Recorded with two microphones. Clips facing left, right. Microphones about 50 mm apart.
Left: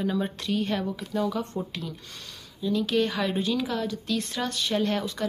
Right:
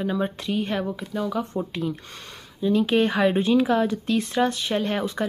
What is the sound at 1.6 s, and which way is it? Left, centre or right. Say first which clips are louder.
Speech: right 6 dB; right.